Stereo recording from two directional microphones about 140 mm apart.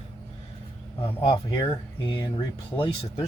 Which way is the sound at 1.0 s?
35° left (ahead or behind).